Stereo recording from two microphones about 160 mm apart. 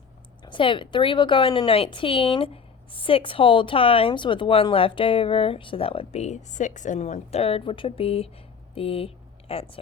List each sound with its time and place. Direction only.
0.4 s speech: 30° left (ahead or behind)